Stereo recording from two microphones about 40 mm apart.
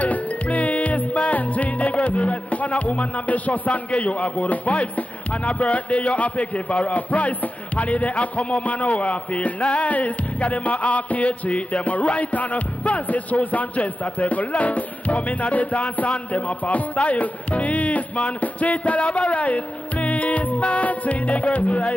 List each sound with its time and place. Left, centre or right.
0.0 s music: left